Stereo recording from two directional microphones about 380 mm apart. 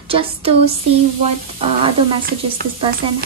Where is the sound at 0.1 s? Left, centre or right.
Centre.